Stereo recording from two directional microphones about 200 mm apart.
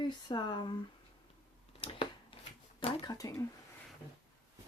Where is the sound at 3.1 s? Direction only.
15° left (ahead or behind).